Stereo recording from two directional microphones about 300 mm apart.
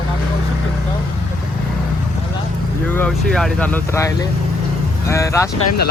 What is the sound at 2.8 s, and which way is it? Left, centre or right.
Speech, centre.